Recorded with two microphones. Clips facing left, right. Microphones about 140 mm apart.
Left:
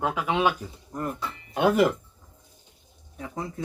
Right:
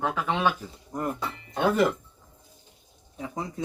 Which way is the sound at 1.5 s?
10° left (ahead or behind).